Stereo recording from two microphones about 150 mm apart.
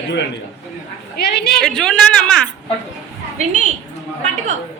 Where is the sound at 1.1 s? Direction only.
90° left.